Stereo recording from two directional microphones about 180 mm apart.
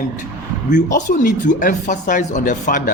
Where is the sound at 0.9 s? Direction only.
45° left (ahead or behind).